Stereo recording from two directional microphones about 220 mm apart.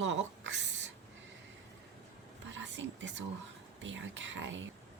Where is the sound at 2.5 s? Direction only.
55° right (ahead or behind).